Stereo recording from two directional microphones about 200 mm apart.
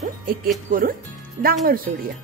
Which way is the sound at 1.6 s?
45° right (ahead or behind).